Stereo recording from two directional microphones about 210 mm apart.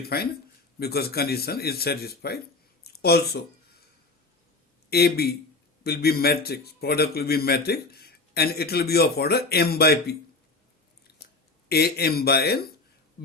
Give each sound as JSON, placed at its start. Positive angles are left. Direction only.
{"t": 0.0, "sound": "a man's voice", "side_deg": 45}
{"t": 4.9, "sound": "a man's voice", "side_deg": 50}
{"t": 11.7, "sound": "a man's voice", "side_deg": 50}